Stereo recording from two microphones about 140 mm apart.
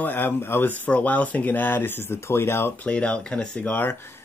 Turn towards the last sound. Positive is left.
turn(degrees=15)  # may be behind; listen again after turning